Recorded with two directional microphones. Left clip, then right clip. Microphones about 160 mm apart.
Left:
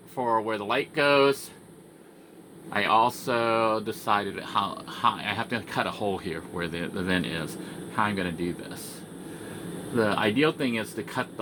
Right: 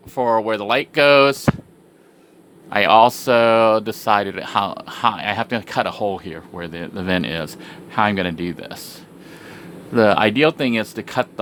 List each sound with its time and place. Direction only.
0.1 s speech: 45° right (ahead or behind)
2.6 s speech: 50° right (ahead or behind)
9.9 s speech: 60° right (ahead or behind)